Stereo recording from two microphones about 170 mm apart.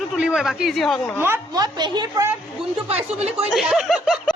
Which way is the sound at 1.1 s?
15° right (ahead or behind).